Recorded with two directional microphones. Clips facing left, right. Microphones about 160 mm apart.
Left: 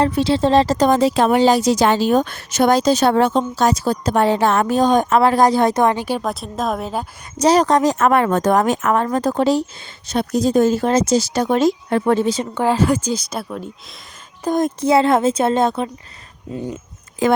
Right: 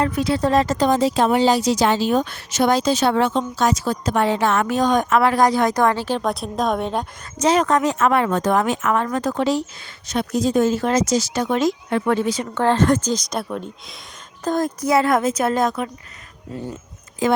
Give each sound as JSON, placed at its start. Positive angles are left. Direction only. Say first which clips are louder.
{"t": 0.0, "sound": "a woman's voice", "louder": "left 3 dB", "side_deg": 30}
{"t": 0.9, "sound": "a woman's voice", "louder": "left 2 dB", "side_deg": 65}
{"t": 7.3, "sound": "a woman's voice", "louder": "left 3 dB", "side_deg": 35}
{"t": 12.5, "sound": "speech", "louder": "right 1 dB", "side_deg": 10}
{"t": 14.4, "sound": "a woman's voice", "louder": "left 3 dB", "side_deg": 20}
{"t": 17.2, "sound": "speech", "louder": "left 3 dB", "side_deg": 60}